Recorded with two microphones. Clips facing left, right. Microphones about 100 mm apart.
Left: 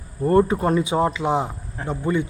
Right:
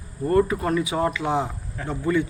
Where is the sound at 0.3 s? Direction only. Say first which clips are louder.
Left 3 dB; 30° left (ahead or behind).